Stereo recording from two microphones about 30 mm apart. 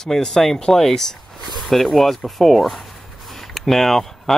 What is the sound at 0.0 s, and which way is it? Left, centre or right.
Speech, centre.